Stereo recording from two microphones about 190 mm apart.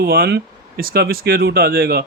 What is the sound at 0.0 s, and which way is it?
Speech, 55° right (ahead or behind).